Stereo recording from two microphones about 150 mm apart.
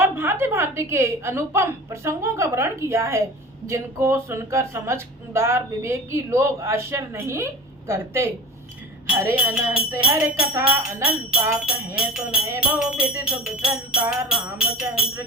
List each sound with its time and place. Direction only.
0.0 s speech: 15° right (ahead or behind)
12.5 s music: 5° right (ahead or behind)